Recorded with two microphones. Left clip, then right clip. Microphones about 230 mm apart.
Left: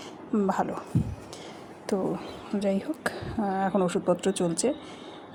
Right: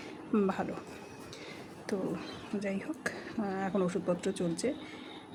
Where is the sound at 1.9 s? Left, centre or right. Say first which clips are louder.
Left 7 dB; centre.